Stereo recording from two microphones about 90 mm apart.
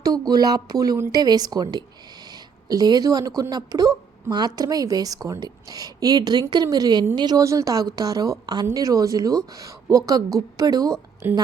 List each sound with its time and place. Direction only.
0.0 s a woman's voice: 45° right (ahead or behind)
7.4 s a woman's voice: 40° right (ahead or behind)
11.2 s a woman's voice: 25° right (ahead or behind)